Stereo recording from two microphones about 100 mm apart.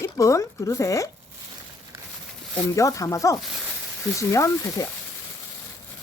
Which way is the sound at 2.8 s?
35° left (ahead or behind).